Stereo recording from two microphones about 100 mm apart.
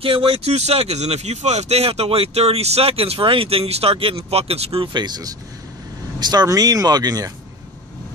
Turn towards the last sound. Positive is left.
turn(degrees=-40)  # may be behind; listen again after turning